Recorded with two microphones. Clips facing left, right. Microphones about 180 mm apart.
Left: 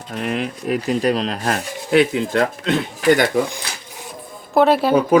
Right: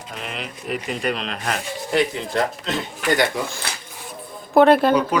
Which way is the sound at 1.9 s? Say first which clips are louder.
Left 6 dB; 60° left (ahead or behind).